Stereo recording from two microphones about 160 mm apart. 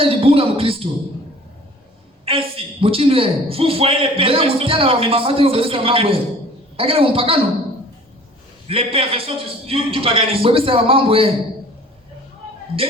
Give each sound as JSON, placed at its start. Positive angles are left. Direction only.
{"t": 0.0, "sound": "a sound", "side_deg": -35}
{"t": 2.2, "sound": "a man's voice", "side_deg": -35}
{"t": 8.6, "sound": "a man's voice", "side_deg": -35}